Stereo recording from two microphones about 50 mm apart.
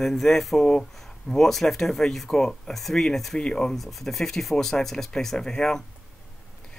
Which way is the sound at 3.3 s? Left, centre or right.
Centre.